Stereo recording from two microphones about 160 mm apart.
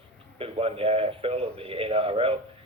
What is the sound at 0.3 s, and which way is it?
A man's voice, 35° right (ahead or behind).